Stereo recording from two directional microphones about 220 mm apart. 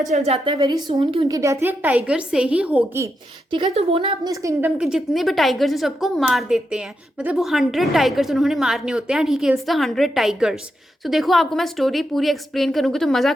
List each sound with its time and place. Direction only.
0.1 s a woman's voice: 30° right (ahead or behind)
1.4 s a woman's voice: 10° right (ahead or behind)
3.5 s a woman's voice: 25° right (ahead or behind)
4.3 s a woman's voice: 15° right (ahead or behind)
4.8 s a woman's voice: centre (ahead or behind)